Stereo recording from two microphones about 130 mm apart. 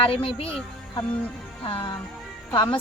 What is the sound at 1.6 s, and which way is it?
Speech, 40° left (ahead or behind).